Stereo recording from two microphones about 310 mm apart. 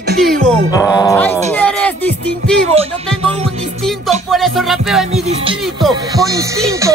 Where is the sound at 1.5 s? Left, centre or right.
Centre.